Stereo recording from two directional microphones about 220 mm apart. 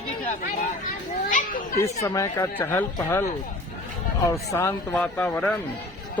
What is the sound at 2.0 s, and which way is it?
Speech, 15° left (ahead or behind).